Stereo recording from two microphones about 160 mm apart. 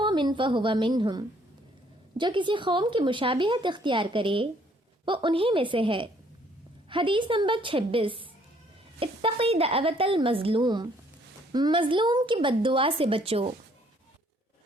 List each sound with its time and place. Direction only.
0.0 s a woman's voice: 30° right (ahead or behind)